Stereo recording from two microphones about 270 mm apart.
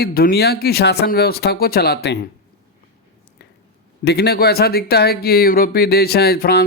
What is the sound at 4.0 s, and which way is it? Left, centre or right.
Speech, left.